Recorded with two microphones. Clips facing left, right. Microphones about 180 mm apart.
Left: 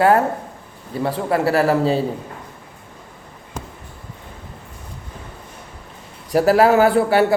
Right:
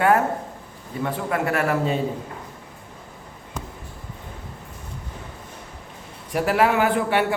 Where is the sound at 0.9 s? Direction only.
35° left (ahead or behind).